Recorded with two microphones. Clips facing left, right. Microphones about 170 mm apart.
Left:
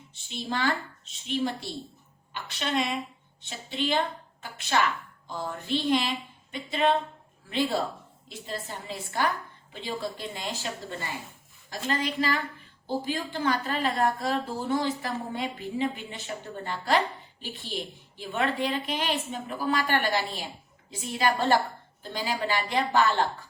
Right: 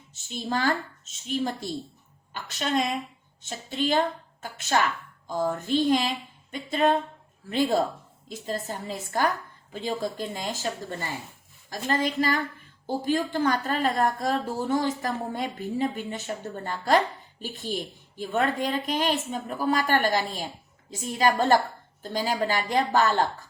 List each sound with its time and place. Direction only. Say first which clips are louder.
0.1 s a woman's voice: right 3 dB; 45° right (ahead or behind)
11.7 s a woman's voice: right 3 dB; 45° right (ahead or behind)